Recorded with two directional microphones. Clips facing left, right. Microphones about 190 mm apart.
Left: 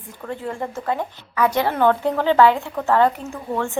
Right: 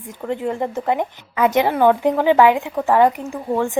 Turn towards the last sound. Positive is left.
turn(degrees=-15)  # may be behind; listen again after turning